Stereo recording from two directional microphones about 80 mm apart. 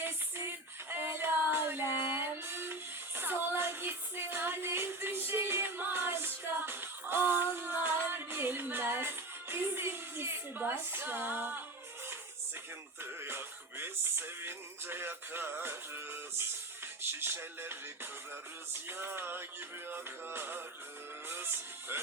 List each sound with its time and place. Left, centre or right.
0.0 s child singing: right
3.2 s music: right
13.0 s music: right